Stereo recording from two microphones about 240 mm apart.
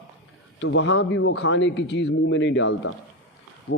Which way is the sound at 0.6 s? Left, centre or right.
Left.